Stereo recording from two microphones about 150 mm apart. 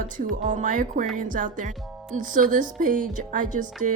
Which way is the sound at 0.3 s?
60° right (ahead or behind).